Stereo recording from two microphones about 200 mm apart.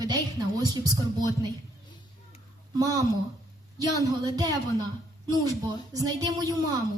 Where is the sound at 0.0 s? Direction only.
20° right (ahead or behind).